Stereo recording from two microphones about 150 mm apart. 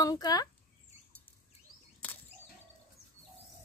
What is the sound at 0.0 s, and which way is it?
Speech, 25° left (ahead or behind).